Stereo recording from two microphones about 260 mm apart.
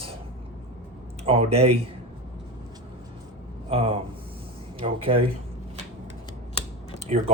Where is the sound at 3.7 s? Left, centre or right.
Right.